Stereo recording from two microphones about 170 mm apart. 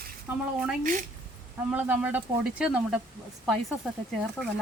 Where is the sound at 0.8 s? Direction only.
50° right (ahead or behind).